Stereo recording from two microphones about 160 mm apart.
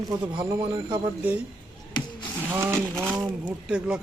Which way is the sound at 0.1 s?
25° right (ahead or behind).